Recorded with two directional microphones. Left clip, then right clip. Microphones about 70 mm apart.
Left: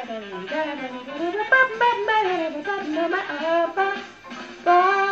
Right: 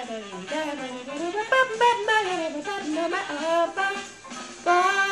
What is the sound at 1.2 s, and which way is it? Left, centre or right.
Saxophone, right.